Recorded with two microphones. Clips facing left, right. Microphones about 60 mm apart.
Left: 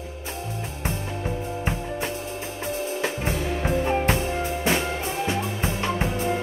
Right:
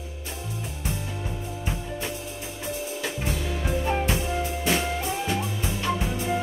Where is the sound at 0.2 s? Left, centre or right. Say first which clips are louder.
Left 3 dB; left.